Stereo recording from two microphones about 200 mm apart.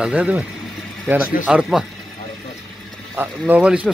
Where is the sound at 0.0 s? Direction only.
5° right (ahead or behind).